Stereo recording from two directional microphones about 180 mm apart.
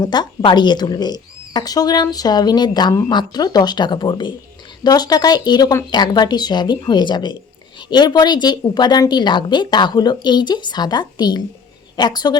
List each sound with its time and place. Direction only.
0.0 s a woman's voice: 25° left (ahead or behind)